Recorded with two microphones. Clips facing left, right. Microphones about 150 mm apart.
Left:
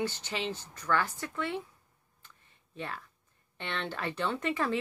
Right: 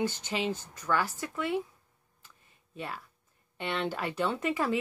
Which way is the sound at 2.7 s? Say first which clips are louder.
Right 1 dB; 10° right (ahead or behind).